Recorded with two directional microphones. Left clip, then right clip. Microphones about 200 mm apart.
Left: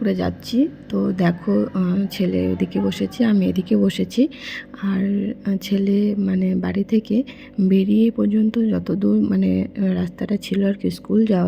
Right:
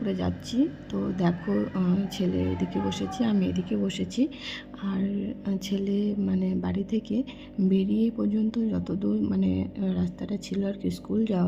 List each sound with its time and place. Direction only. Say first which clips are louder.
0.0 s speech: left 8 dB; 20° left (ahead or behind)